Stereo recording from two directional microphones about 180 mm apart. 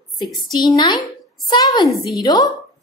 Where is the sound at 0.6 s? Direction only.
25° left (ahead or behind).